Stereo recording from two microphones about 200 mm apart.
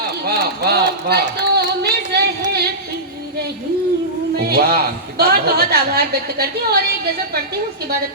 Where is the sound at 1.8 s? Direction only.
55° right (ahead or behind).